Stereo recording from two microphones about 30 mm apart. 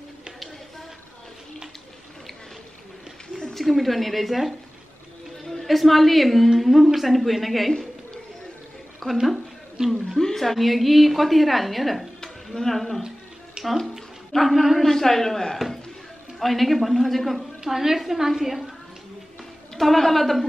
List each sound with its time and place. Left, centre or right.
3.5 s speech: centre
5.4 s a sound: centre
5.7 s speech: centre
9.0 s a woman's voice: centre
10.1 s a sound: centre
10.4 s speech: centre
12.5 s a man's voice: centre
13.7 s speech: centre
14.8 s a man's voice: centre
16.3 s speech: centre
17.6 s a woman's voice: centre
19.8 s speech: centre